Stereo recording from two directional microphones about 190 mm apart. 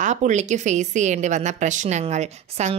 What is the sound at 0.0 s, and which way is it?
A woman's voice, 40° right (ahead or behind).